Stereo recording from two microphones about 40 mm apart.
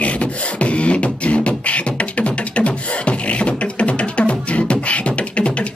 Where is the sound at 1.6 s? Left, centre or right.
Left.